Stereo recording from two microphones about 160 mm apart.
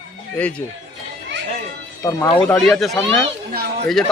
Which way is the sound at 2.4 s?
5° left (ahead or behind).